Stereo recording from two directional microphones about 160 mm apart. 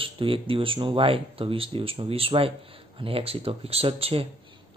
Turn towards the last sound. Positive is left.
turn(degrees=-35)  # may be behind; listen again after turning